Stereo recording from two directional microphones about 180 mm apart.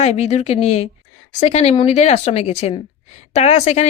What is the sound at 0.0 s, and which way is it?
A woman's voice, 35° left (ahead or behind).